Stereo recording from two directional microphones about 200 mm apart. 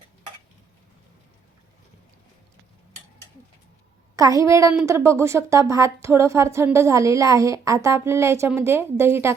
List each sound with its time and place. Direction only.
4.1 s a woman's voice: 15° right (ahead or behind)